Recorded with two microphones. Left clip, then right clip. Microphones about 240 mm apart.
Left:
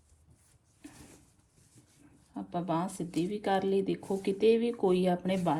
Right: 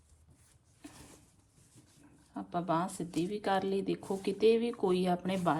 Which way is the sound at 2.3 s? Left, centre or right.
Centre.